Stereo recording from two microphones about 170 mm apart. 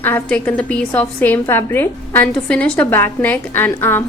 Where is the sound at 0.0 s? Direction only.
10° left (ahead or behind).